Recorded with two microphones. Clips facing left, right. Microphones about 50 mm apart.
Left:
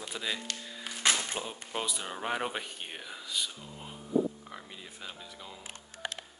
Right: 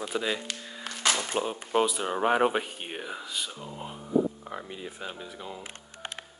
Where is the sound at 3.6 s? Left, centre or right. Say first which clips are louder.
Right 6 dB; right.